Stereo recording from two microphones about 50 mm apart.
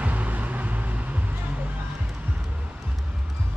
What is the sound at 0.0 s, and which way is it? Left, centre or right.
Music, right.